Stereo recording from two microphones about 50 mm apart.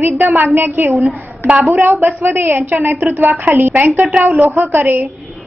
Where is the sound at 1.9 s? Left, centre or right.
Right.